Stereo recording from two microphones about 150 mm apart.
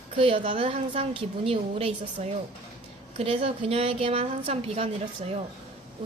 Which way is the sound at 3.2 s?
40° right (ahead or behind).